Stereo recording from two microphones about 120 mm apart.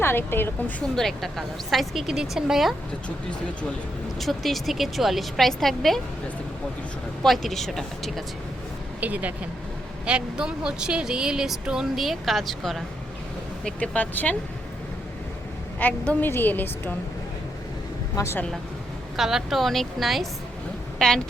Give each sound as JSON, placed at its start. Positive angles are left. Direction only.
{"t": 0.0, "sound": "a woman's voice", "side_deg": 20}
{"t": 0.9, "sound": "speech", "side_deg": 0}
{"t": 4.2, "sound": "speech", "side_deg": 0}
{"t": 7.2, "sound": "speech", "side_deg": 0}
{"t": 9.0, "sound": "a woman's voice", "side_deg": -15}
{"t": 15.8, "sound": "a woman's voice", "side_deg": 15}
{"t": 18.2, "sound": "speech", "side_deg": 20}
{"t": 19.1, "sound": "a woman's voice", "side_deg": -5}